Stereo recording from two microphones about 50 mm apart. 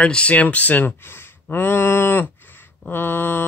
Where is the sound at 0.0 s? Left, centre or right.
Left.